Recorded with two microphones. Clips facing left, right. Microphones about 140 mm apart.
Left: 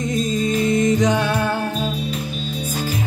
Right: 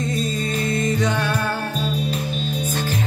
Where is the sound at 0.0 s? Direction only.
15° left (ahead or behind).